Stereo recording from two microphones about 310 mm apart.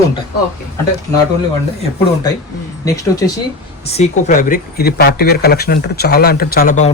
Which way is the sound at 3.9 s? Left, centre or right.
Left.